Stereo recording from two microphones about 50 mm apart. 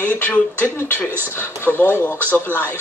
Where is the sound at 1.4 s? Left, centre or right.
Left.